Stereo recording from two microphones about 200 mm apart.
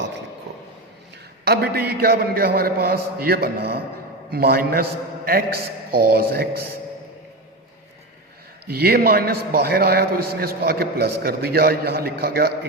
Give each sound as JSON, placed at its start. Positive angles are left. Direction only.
{"t": 1.5, "sound": "a man's voice", "side_deg": -50}
{"t": 8.7, "sound": "a man's voice", "side_deg": -50}